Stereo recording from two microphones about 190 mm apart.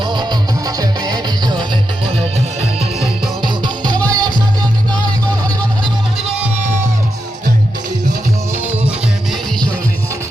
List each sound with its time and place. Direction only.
0.0 s music: 25° right (ahead or behind)
8.5 s music: 10° right (ahead or behind)